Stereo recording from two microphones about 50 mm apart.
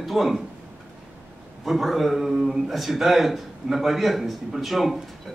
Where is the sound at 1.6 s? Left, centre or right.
Centre.